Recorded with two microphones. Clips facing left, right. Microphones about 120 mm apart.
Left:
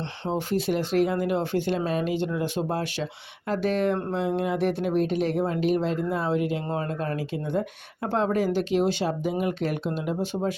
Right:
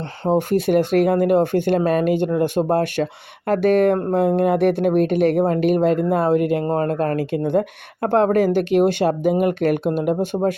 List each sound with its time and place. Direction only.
0.3 s speech: 55° right (ahead or behind)